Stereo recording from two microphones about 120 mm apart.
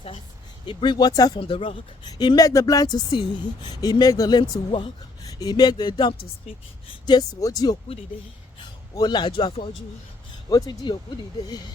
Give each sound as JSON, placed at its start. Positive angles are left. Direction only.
{"t": 0.7, "sound": "speech", "side_deg": 40}
{"t": 1.4, "sound": "speech", "side_deg": 50}
{"t": 2.0, "sound": "speech", "side_deg": 35}
{"t": 9.0, "sound": "speech", "side_deg": 40}
{"t": 10.5, "sound": "speech", "side_deg": 35}